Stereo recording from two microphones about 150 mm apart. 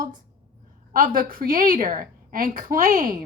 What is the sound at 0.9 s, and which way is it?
A woman's voice, 65° right (ahead or behind).